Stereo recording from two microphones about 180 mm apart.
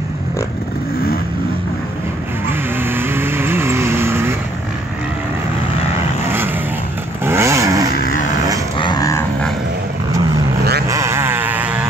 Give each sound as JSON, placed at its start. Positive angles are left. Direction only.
{"t": 2.8, "sound": "vehicle", "side_deg": -10}
{"t": 7.2, "sound": "vehicle", "side_deg": -15}
{"t": 7.9, "sound": "vehicle", "side_deg": 50}
{"t": 8.7, "sound": "dog", "side_deg": 25}
{"t": 10.9, "sound": "a sound", "side_deg": -15}